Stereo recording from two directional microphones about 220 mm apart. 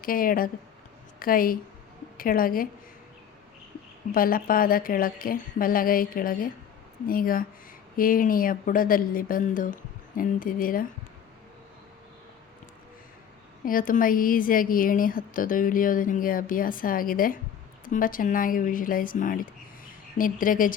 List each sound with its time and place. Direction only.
0.0 s a woman's voice: 40° left (ahead or behind)
4.1 s a woman's voice: 40° left (ahead or behind)
13.7 s a woman's voice: 40° left (ahead or behind)